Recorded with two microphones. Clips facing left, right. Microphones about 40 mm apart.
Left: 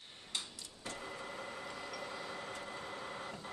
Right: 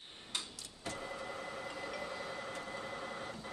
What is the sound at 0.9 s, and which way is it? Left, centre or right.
Vehicle, centre.